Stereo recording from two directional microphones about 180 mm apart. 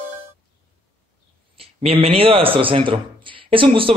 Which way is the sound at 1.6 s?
30° right (ahead or behind).